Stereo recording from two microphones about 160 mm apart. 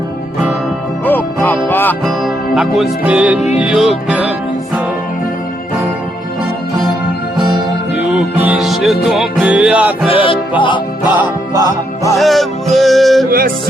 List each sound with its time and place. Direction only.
1.0 s music: 10° left (ahead or behind)
2.0 s music: centre (ahead or behind)
7.3 s music: 25° right (ahead or behind)
8.1 s music: 10° right (ahead or behind)
10.1 s music: 35° left (ahead or behind)
12.1 s music: centre (ahead or behind)